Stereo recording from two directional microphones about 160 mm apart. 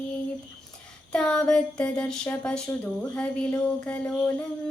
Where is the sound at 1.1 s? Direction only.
5° left (ahead or behind).